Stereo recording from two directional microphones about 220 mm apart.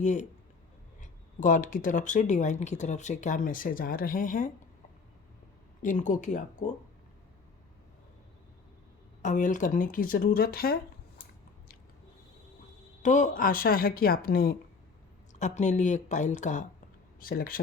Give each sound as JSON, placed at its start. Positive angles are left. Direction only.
{"t": 0.0, "sound": "speech", "side_deg": 35}
{"t": 1.4, "sound": "speech", "side_deg": 35}
{"t": 5.8, "sound": "speech", "side_deg": 35}
{"t": 9.2, "sound": "speech", "side_deg": 35}
{"t": 13.0, "sound": "speech", "side_deg": 35}